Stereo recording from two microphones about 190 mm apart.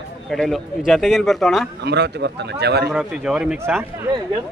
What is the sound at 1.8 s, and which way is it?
Speech, 60° right (ahead or behind).